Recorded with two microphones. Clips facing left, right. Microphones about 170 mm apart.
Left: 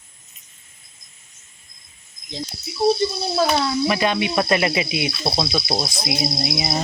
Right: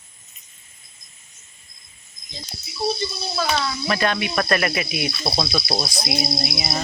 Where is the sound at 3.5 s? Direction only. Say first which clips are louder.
Left 4 dB; 15° left (ahead or behind).